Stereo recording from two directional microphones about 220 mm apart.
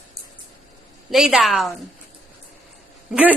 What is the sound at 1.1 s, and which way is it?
Speech, centre (ahead or behind).